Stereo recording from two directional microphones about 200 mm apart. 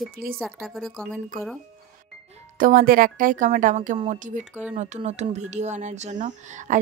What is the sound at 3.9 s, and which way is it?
Speech, 25° right (ahead or behind).